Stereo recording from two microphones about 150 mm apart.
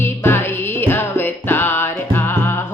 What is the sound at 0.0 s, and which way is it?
Music, 15° left (ahead or behind).